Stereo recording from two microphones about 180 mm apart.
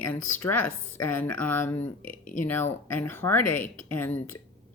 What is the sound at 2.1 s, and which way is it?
Speech, 50° left (ahead or behind).